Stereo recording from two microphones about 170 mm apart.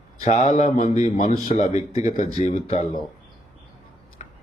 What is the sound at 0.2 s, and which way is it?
Speech, 40° left (ahead or behind).